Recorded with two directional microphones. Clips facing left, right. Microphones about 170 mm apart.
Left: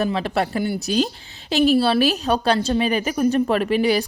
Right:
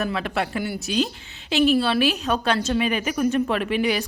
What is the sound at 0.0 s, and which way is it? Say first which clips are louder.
A woman's voice: left 4 dB; 30° left (ahead or behind).